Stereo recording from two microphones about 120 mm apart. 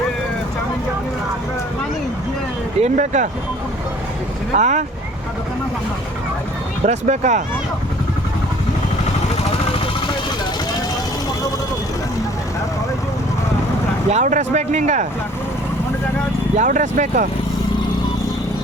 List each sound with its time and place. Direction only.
2.8 s speech: 90° right
4.5 s speech: 90° right
6.8 s speech: 80° right
14.1 s speech: 85° right
16.6 s speech: 90° right